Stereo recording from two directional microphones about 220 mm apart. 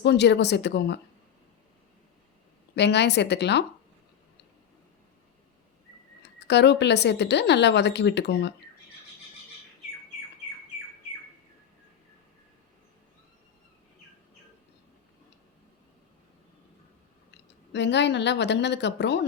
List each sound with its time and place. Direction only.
0.0 s speech: 50° left (ahead or behind)
2.7 s speech: 50° left (ahead or behind)
6.2 s speech: 50° left (ahead or behind)
17.7 s speech: 50° left (ahead or behind)